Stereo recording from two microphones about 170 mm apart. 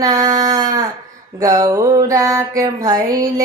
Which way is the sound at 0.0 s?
20° right (ahead or behind).